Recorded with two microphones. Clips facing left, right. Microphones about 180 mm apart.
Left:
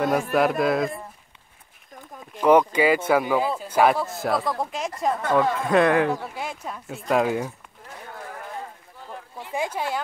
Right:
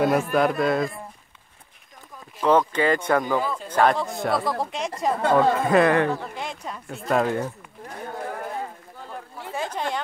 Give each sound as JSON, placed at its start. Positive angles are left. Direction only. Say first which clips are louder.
{"t": 0.0, "sound": "speech", "louder": "right 1 dB", "side_deg": 0}
{"t": 2.4, "sound": "speech", "louder": "left 2 dB", "side_deg": 10}
{"t": 5.2, "sound": "speech", "louder": "right 3 dB", "side_deg": -30}
{"t": 5.6, "sound": "speech", "louder": "right 1 dB", "side_deg": 0}
{"t": 9.5, "sound": "speech", "louder": "left 1 dB", "side_deg": 10}